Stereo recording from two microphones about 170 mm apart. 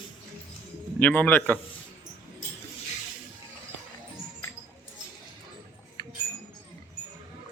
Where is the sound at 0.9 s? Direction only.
10° left (ahead or behind).